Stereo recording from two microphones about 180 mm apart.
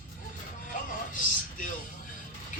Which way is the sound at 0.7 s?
50° left (ahead or behind).